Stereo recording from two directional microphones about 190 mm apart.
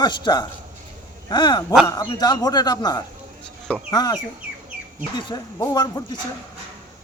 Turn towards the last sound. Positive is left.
turn(degrees=20)  # may be behind; listen again after turning